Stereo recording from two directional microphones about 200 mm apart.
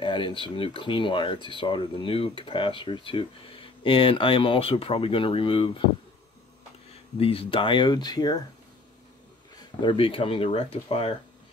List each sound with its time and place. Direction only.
0.0 s speech: 25° left (ahead or behind)
7.2 s speech: 30° left (ahead or behind)
9.6 s speech: 20° left (ahead or behind)